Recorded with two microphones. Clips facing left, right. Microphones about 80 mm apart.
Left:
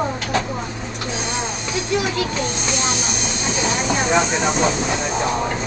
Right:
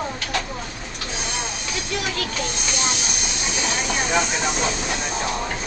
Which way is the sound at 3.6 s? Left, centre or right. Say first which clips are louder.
Left 4 dB; centre.